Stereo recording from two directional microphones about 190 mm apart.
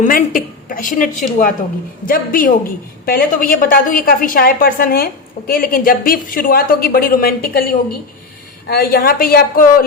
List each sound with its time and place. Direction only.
0.0 s a woman's voice: 45° left (ahead or behind)